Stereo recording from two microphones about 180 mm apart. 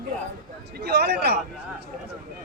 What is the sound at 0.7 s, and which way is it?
Speech, 65° right (ahead or behind).